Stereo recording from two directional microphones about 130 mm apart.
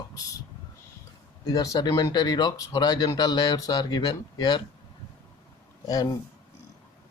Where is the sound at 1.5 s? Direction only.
30° left (ahead or behind).